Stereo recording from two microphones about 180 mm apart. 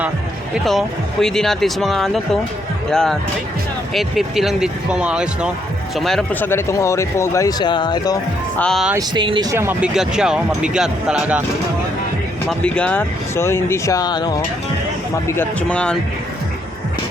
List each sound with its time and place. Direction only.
0.5 s speech: centre (ahead or behind); by 8.2 s 20° left (ahead or behind)
8.5 s speech: 5° left (ahead or behind)
8.9 s speech: 20° right (ahead or behind); by 11.4 s 5° right (ahead or behind)
12.5 s speech: 5° left (ahead or behind); by 14.4 s 20° left (ahead or behind)
15.4 s speech: 5° left (ahead or behind)